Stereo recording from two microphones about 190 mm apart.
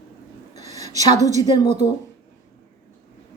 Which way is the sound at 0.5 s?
35° right (ahead or behind).